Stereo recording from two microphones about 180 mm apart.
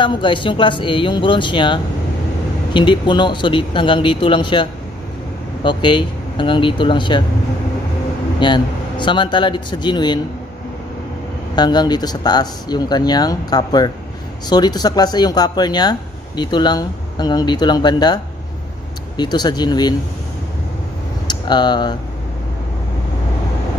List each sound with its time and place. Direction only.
0.0 s speech: 25° left (ahead or behind)
8.4 s speech: 25° left (ahead or behind)
11.5 s speech: 25° left (ahead or behind)
21.3 s speech: 25° left (ahead or behind)